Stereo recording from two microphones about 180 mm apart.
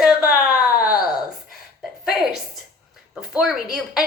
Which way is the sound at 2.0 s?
Centre (ahead or behind).